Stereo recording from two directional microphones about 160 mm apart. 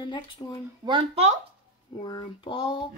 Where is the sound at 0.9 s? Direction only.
35° right (ahead or behind).